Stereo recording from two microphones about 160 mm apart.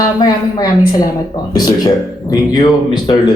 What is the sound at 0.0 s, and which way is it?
Speech, 25° left (ahead or behind).